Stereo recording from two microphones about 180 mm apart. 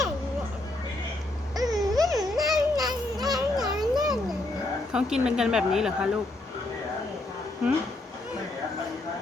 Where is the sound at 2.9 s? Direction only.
20° right (ahead or behind).